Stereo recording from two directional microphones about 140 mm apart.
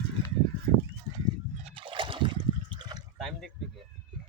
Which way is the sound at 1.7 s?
35° right (ahead or behind).